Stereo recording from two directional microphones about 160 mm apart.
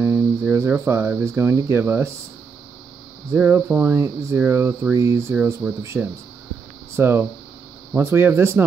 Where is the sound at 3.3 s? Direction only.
10° right (ahead or behind).